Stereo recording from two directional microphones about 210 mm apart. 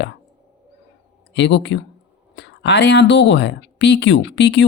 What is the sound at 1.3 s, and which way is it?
Speech, 60° left (ahead or behind).